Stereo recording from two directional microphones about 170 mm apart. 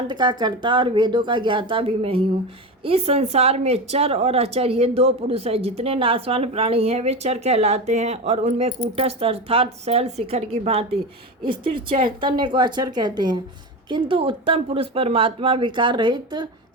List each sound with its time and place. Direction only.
0.1 s speech: 25° right (ahead or behind)